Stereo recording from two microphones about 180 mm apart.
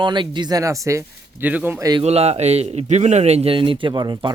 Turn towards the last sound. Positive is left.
turn(degrees=-25)  # may be behind; listen again after turning